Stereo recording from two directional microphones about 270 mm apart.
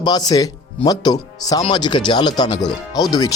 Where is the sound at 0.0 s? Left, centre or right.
Centre.